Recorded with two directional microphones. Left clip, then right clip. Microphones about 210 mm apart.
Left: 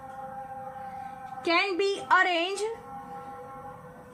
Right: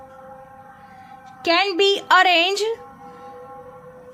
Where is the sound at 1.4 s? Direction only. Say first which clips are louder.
Right 8 dB; 45° right (ahead or behind).